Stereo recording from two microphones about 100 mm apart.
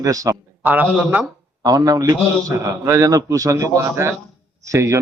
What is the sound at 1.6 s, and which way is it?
A man's voice, 35° right (ahead or behind).